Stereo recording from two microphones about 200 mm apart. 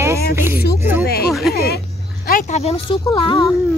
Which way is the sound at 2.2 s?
40° left (ahead or behind).